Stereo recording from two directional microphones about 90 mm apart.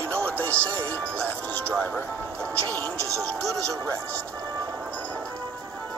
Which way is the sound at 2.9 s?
35° right (ahead or behind).